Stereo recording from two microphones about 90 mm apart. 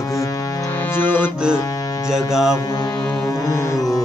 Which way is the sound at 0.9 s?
20° left (ahead or behind).